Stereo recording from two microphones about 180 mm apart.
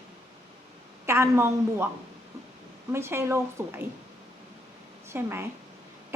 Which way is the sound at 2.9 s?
15° right (ahead or behind).